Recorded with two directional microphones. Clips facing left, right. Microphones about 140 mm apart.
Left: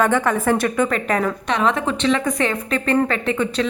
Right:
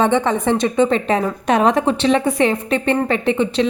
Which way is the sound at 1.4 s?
40° right (ahead or behind).